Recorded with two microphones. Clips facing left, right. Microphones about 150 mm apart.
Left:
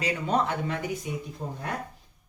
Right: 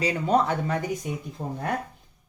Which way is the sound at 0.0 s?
35° right (ahead or behind).